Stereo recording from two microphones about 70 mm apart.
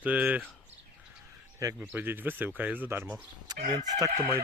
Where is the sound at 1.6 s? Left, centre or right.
Right.